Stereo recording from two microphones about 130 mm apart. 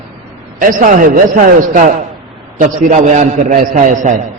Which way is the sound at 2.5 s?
75° right (ahead or behind).